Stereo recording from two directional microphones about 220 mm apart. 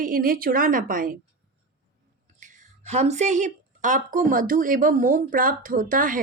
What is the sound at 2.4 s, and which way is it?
Speech, 30° right (ahead or behind).